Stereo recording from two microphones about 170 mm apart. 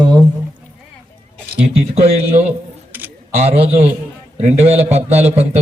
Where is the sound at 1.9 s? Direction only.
35° right (ahead or behind).